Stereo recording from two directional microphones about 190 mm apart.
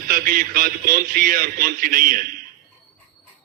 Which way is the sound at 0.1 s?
50° right (ahead or behind).